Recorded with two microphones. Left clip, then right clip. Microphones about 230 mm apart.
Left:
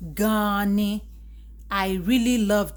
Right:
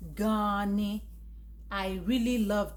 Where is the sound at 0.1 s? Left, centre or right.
Left.